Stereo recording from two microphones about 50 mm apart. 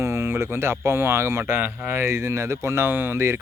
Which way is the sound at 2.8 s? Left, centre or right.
Right.